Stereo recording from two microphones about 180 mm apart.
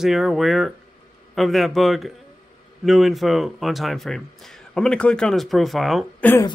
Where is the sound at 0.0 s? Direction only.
Centre (ahead or behind).